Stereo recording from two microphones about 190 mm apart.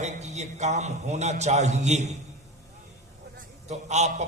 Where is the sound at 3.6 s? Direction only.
35° right (ahead or behind).